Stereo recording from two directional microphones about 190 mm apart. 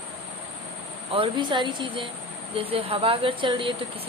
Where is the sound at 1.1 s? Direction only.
25° right (ahead or behind).